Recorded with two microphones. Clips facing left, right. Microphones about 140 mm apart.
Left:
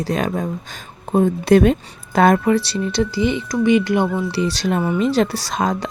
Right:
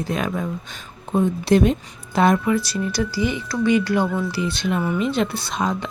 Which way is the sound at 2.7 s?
25° left (ahead or behind).